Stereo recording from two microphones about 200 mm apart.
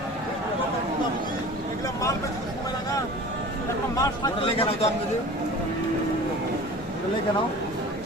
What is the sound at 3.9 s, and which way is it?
Speech, 25° left (ahead or behind).